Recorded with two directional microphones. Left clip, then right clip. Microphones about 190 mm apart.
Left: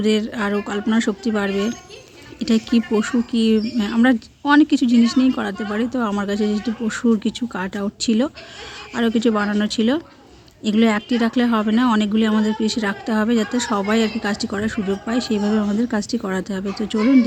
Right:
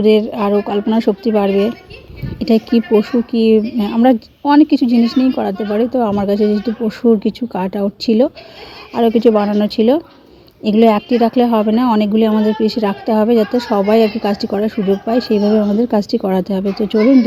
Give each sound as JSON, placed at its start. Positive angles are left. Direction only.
{"t": 0.0, "sound": "a woman's voice", "side_deg": 0}